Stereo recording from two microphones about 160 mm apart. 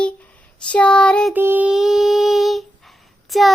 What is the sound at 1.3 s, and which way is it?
Child singing, 10° right (ahead or behind).